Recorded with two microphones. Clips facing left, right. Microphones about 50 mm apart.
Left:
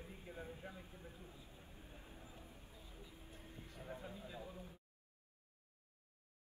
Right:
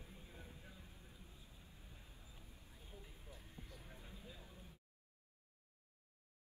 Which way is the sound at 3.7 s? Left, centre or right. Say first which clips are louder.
Left 8 dB; left.